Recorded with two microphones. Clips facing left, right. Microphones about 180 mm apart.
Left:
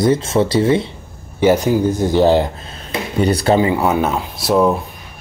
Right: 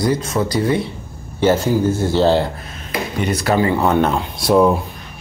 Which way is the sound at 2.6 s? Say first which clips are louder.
Even; 30° left (ahead or behind).